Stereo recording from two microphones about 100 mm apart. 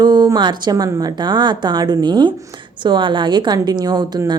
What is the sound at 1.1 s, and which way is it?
Speech, 50° right (ahead or behind).